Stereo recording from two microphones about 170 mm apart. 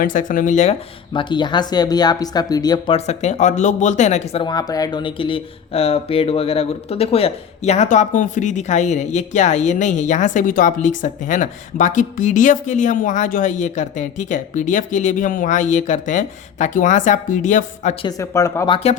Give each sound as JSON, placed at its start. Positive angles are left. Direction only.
{"t": 0.0, "sound": "speech", "side_deg": 50}
{"t": 1.1, "sound": "speech", "side_deg": 30}
{"t": 2.9, "sound": "speech", "side_deg": 40}
{"t": 4.4, "sound": "speech", "side_deg": 20}
{"t": 18.2, "sound": "speech", "side_deg": 20}
{"t": 18.7, "sound": "speech", "side_deg": 40}